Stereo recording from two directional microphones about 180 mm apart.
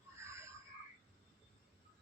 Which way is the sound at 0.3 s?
15° right (ahead or behind).